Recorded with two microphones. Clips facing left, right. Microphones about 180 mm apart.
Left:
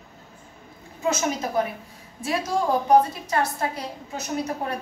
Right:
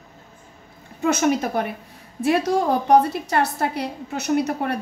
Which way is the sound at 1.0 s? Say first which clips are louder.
Right 5 dB; 65° right (ahead or behind).